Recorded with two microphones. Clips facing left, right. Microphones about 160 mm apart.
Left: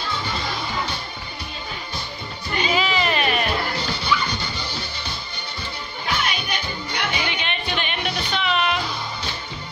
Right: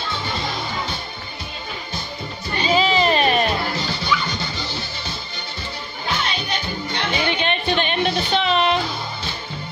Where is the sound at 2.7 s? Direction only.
30° right (ahead or behind).